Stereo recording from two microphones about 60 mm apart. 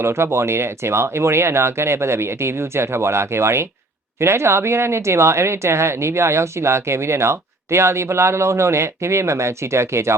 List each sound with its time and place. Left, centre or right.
0.0 s speech: right